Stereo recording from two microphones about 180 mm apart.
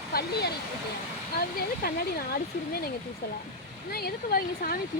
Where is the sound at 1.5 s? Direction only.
55° left (ahead or behind).